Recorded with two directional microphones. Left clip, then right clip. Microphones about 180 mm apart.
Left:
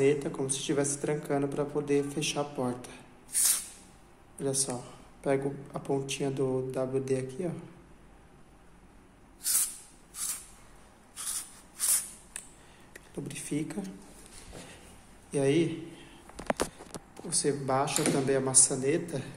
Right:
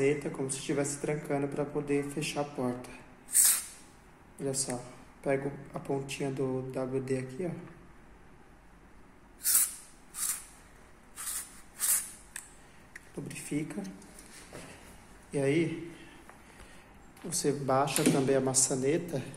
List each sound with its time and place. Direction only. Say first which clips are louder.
0.0 s speech: left 3 dB; 10° left (ahead or behind)
3.3 s spray: right 2 dB; centre (ahead or behind)
4.4 s speech: left 2 dB; 15° left (ahead or behind)
9.4 s a sound: right 1 dB; centre (ahead or behind)
13.3 s speech: left 1 dB; 20° left (ahead or behind)
15.3 s speech: left 2 dB; 10° left (ahead or behind)
17.3 s speech: even; centre (ahead or behind)